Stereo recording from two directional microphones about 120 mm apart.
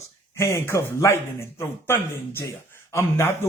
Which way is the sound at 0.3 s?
25° left (ahead or behind).